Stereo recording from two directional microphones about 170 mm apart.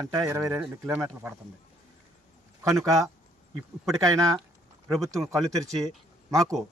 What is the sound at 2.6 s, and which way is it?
Speech, 20° right (ahead or behind).